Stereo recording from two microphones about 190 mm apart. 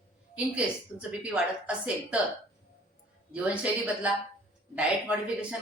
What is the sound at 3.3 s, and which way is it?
A woman's voice, 5° right (ahead or behind).